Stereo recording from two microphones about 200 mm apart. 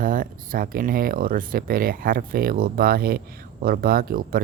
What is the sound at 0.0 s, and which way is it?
Speech, 45° right (ahead or behind).